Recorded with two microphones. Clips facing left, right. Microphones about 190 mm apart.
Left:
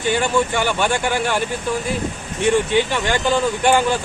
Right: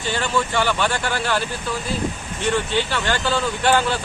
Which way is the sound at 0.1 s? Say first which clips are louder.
Left 4 dB; 15° left (ahead or behind).